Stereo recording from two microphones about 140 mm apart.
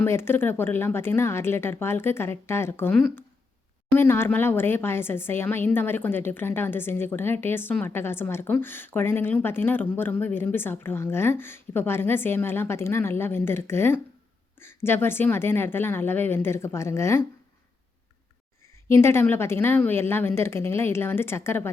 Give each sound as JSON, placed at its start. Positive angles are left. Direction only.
{"t": 0.0, "sound": "a woman's voice", "side_deg": 15}
{"t": 18.9, "sound": "a woman's voice", "side_deg": 20}